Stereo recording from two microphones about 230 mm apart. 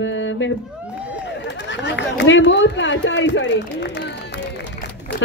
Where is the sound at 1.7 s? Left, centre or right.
Left.